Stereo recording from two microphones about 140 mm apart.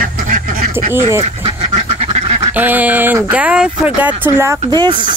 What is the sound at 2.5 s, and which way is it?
Speech, 10° right (ahead or behind).